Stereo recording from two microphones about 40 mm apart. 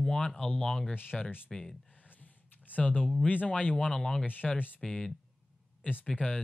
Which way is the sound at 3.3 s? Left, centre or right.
Left.